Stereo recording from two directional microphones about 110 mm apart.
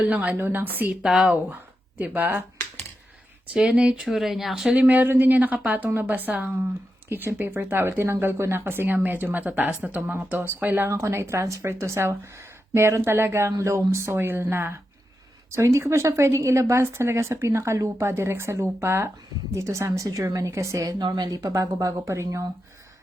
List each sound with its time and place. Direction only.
0.0 s speech: 15° right (ahead or behind)
1.0 s speech: 5° right (ahead or behind)
1.5 s speech: 15° right (ahead or behind)
3.5 s speech: 5° right (ahead or behind); by 22.4 s 25° right (ahead or behind)